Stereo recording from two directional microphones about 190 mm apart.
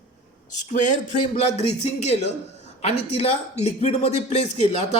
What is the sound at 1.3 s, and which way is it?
A man's voice, 35° left (ahead or behind).